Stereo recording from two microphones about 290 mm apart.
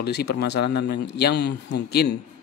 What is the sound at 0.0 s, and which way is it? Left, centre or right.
Speech, left.